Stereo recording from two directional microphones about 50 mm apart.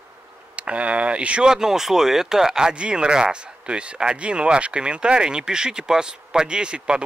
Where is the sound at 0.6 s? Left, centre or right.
Right.